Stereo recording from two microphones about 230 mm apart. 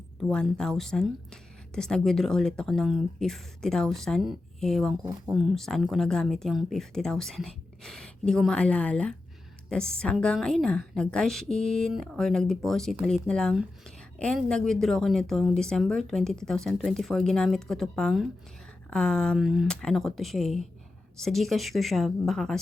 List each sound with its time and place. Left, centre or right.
0.2 s a woman's voice: centre